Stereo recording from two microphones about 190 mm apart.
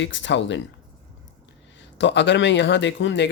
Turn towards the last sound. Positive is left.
turn(degrees=70)  # may be behind; listen again after turning